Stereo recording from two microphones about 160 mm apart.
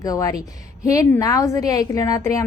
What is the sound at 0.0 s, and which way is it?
A woman's voice, 20° left (ahead or behind).